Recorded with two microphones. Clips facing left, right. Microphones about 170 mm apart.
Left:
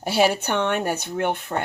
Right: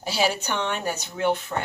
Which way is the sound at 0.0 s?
55° left (ahead or behind).